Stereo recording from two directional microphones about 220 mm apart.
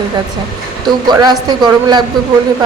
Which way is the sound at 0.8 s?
20° right (ahead or behind).